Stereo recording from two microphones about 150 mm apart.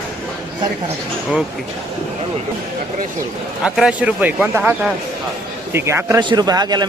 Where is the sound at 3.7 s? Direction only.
5° right (ahead or behind).